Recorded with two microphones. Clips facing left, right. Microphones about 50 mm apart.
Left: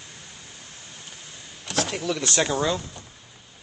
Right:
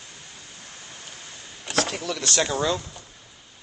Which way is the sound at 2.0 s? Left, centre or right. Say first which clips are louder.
Left 1 dB; centre.